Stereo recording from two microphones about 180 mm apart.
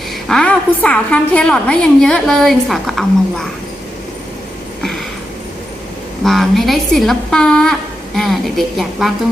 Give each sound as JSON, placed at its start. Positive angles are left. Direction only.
{"t": 0.3, "sound": "a woman's voice", "side_deg": 5}
{"t": 6.2, "sound": "a woman's voice", "side_deg": 0}